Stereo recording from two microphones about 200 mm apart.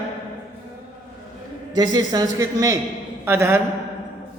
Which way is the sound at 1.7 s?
20° right (ahead or behind).